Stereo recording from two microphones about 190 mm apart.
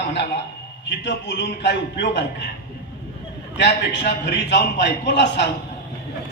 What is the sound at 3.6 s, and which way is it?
A woman's voice, 65° left (ahead or behind).